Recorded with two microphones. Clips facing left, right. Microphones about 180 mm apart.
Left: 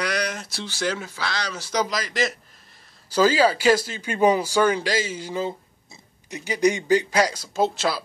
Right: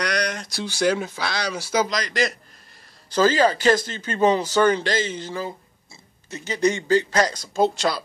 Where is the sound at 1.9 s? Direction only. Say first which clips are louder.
Right 1 dB; 5° left (ahead or behind).